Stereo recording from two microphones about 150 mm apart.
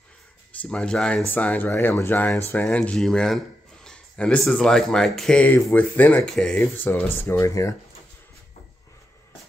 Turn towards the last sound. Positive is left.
turn(degrees=20)  # may be behind; listen again after turning